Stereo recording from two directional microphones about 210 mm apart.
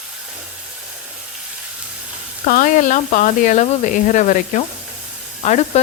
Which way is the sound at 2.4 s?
40° left (ahead or behind).